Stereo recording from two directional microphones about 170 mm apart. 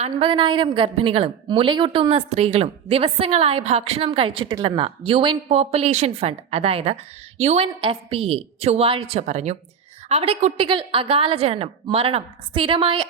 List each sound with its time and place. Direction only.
0.0 s a woman's voice: 30° right (ahead or behind)